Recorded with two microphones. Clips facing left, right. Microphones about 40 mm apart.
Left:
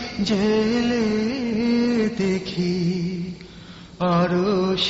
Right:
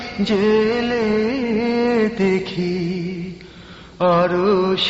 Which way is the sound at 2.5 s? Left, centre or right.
Right.